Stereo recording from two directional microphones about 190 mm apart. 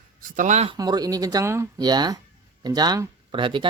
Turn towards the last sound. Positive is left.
turn(degrees=-25)  # may be behind; listen again after turning